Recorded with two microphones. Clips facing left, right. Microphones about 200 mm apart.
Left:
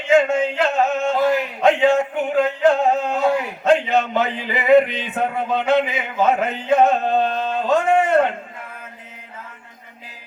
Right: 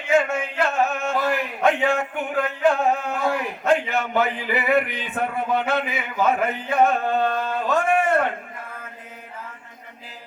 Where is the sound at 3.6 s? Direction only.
20° left (ahead or behind).